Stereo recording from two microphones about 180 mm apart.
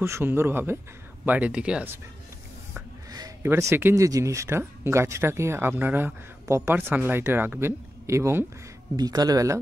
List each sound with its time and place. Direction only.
0.0 s speech: 15° right (ahead or behind)
3.1 s speech: 20° right (ahead or behind)